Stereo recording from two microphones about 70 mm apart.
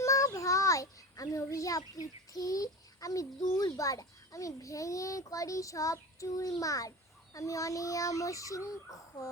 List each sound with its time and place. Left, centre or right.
0.0 s a child's voice: left